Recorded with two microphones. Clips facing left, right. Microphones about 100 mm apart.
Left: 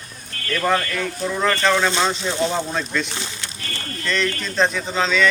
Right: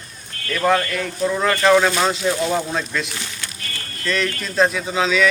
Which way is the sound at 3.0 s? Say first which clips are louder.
Left 1 dB; 25° left (ahead or behind).